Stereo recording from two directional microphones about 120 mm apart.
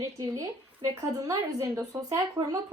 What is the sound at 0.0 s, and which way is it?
A woman's voice, 30° right (ahead or behind).